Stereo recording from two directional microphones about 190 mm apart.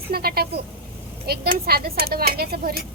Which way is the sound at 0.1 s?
55° right (ahead or behind).